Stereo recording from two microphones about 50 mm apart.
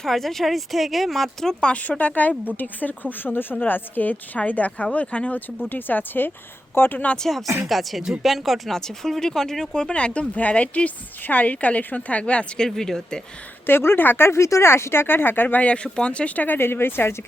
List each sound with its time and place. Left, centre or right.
0.0 s speech: centre
1.6 s a woman's voice: left
5.6 s speech: left
7.2 s speech: centre
8.7 s speech: centre
9.9 s a woman's voice: left
12.5 s speech: centre
13.7 s speech: left
14.3 s speech: left
15.6 s a woman's voice: left
16.6 s speech: left